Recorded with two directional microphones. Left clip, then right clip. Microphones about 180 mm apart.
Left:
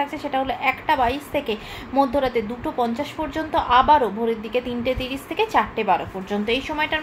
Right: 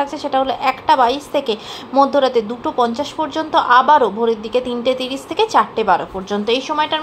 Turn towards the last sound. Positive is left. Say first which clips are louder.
# right 5 dB
turn(degrees=-15)  # may be behind; listen again after turning